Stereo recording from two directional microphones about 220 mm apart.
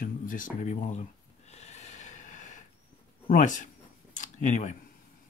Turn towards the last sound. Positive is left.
turn(degrees=35)  # may be behind; listen again after turning